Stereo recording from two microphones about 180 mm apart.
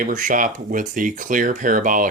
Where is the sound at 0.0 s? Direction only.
45° right (ahead or behind).